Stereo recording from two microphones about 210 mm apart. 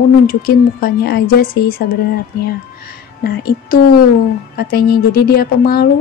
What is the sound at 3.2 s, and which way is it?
Speech, 45° left (ahead or behind).